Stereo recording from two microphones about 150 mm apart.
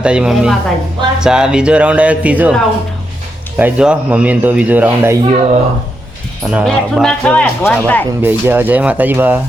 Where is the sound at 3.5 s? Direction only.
10° right (ahead or behind).